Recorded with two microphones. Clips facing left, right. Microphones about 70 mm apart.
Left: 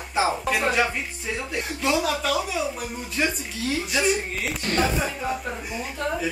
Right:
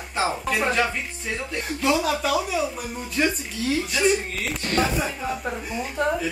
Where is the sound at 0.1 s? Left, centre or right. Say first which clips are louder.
Left 2 dB; centre.